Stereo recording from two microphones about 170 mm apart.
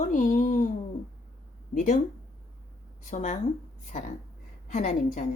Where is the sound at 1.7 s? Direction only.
45° left (ahead or behind).